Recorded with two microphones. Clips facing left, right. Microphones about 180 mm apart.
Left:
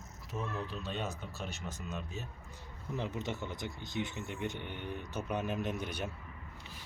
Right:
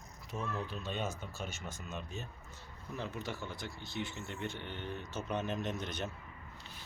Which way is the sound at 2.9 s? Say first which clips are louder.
Left 3 dB; 20° left (ahead or behind).